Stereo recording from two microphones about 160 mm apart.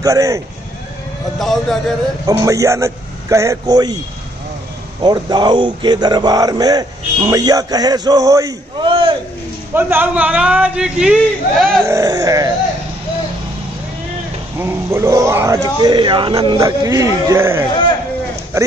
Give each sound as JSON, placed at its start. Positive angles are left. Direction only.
{"t": 0.0, "sound": "speech", "side_deg": -20}
{"t": 1.4, "sound": "a man's voice", "side_deg": 0}
{"t": 2.2, "sound": "speech", "side_deg": -20}
{"t": 5.0, "sound": "speech", "side_deg": -25}
{"t": 9.8, "sound": "a man's voice", "side_deg": -10}
{"t": 11.8, "sound": "speech", "side_deg": -20}
{"t": 14.6, "sound": "speech", "side_deg": -15}